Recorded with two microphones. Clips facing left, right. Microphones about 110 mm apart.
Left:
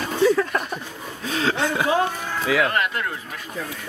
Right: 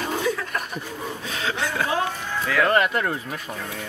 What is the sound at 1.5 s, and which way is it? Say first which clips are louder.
Speech: left 4 dB; 20° left (ahead or behind).